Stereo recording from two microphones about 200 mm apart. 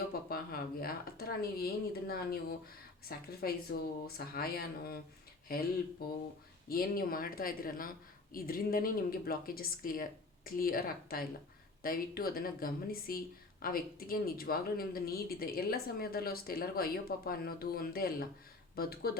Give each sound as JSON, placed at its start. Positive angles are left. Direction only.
{"t": 0.3, "sound": "speech", "side_deg": 50}
{"t": 6.7, "sound": "speech", "side_deg": 45}